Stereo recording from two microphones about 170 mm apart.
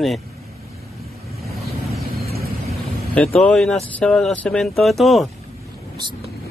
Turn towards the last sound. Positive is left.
turn(degrees=0)  # may be behind; listen again after turning